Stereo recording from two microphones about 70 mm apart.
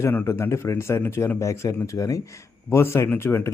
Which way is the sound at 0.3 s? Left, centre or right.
Left.